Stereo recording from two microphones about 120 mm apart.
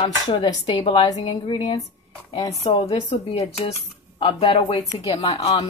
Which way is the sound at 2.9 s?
40° left (ahead or behind).